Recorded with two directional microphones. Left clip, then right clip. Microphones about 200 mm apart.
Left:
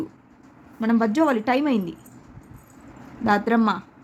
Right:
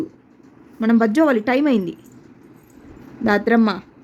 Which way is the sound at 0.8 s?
15° right (ahead or behind).